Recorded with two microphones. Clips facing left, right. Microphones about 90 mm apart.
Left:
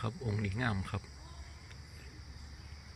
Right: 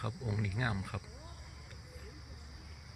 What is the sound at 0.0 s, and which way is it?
Speech, 15° right (ahead or behind).